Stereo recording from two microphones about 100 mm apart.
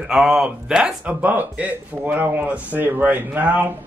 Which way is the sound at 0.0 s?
10° right (ahead or behind).